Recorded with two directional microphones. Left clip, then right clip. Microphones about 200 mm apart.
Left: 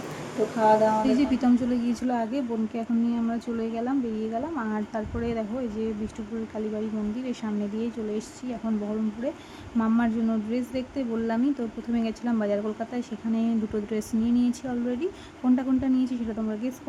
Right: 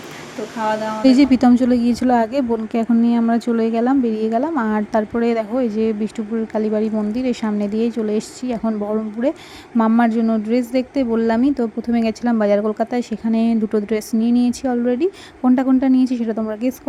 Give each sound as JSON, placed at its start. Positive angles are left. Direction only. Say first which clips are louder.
{"t": 1.0, "sound": "a woman's voice", "louder": "right 11 dB", "side_deg": -40}